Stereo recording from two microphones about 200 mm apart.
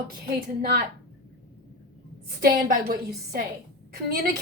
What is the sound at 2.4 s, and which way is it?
A woman's voice, 45° right (ahead or behind).